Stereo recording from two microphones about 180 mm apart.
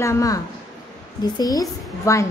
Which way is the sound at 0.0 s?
15° left (ahead or behind).